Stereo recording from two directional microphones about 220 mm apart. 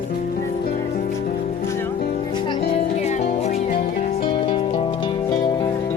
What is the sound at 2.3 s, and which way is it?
Music, 20° left (ahead or behind).